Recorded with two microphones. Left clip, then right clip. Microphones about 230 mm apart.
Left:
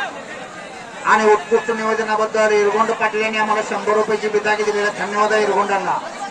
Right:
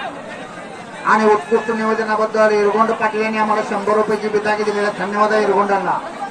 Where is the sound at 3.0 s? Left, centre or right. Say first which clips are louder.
Right 1 dB; left.